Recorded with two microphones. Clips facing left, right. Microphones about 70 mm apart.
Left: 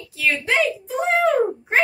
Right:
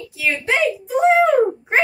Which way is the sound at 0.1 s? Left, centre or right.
Centre.